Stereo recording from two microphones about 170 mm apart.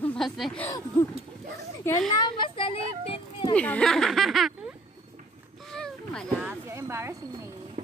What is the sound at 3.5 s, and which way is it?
Speech, 5° left (ahead or behind).